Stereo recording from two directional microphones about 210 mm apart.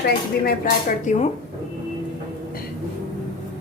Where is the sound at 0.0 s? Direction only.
45° left (ahead or behind).